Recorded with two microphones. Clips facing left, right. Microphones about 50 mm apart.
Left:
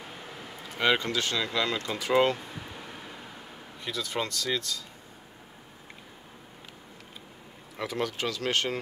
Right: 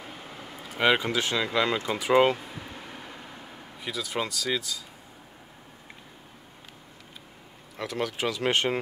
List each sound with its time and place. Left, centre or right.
0.0 s speech: centre
2.3 s a sound: centre
7.7 s speech: centre
8.2 s speech: centre